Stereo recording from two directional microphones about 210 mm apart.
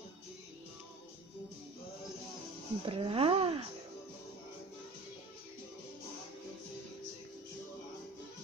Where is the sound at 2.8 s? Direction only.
25° right (ahead or behind).